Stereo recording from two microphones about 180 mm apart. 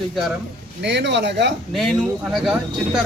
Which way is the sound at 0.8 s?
70° right (ahead or behind).